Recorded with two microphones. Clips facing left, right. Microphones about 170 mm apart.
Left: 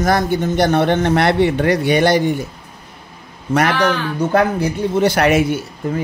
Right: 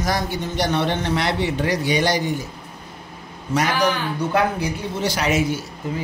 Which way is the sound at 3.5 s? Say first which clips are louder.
Left 4 dB; 60° left (ahead or behind).